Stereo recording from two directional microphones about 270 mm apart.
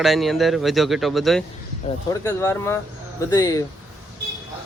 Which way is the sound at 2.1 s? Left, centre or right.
Centre.